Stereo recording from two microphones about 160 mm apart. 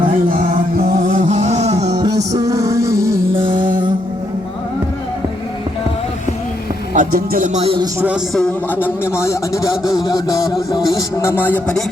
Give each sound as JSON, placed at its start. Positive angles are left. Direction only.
{"t": 0.9, "sound": "music", "side_deg": -55}
{"t": 2.0, "sound": "music", "side_deg": -20}
{"t": 3.3, "sound": "music", "side_deg": -30}
{"t": 6.9, "sound": "speech", "side_deg": -55}
{"t": 7.6, "sound": "speech", "side_deg": -35}
{"t": 8.0, "sound": "a man's voice", "side_deg": -5}
{"t": 8.4, "sound": "a man's voice", "side_deg": 10}
{"t": 10.1, "sound": "a sound", "side_deg": 20}
{"t": 10.8, "sound": "a man's voice", "side_deg": 20}